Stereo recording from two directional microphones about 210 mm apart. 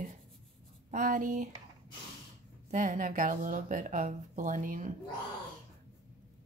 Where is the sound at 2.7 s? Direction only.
35° right (ahead or behind).